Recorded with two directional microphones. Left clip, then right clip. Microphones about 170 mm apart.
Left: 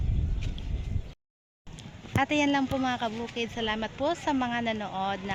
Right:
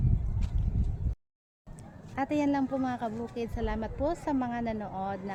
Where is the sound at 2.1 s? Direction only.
Centre (ahead or behind).